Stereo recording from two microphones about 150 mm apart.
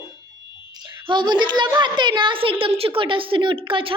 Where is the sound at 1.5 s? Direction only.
30° right (ahead or behind).